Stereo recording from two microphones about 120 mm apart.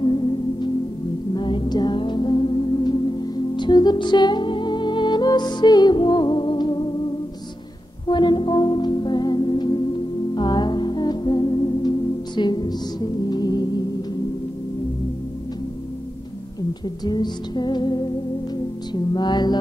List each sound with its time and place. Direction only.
0.0 s music: 40° left (ahead or behind)
8.1 s music: 40° left (ahead or behind)
17.0 s music: 35° left (ahead or behind)